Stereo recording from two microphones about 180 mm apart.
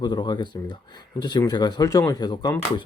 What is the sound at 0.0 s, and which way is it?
Speech, 25° left (ahead or behind).